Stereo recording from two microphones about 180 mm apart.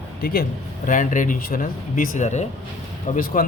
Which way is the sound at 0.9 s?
45° left (ahead or behind).